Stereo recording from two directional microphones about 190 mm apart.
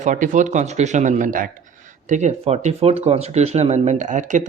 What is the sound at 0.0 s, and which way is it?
Speech, 40° right (ahead or behind).